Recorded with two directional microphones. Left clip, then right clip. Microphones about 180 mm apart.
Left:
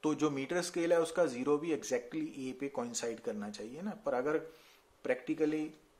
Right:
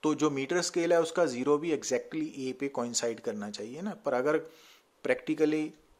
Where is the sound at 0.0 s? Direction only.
30° right (ahead or behind).